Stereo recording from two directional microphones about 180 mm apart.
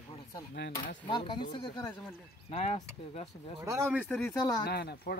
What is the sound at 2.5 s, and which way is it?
Speech, 40° left (ahead or behind).